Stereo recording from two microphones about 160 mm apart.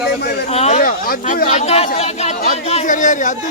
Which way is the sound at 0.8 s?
65° left (ahead or behind).